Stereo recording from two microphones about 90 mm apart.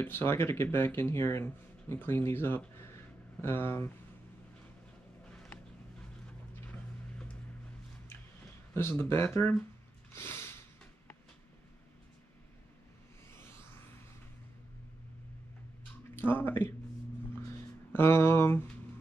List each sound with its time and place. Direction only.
0.0 s speech: 25° left (ahead or behind)
8.7 s speech: 25° left (ahead or behind)
10.1 s a sound: 30° left (ahead or behind)
16.2 s speech: 25° left (ahead or behind)
17.9 s speech: 30° left (ahead or behind)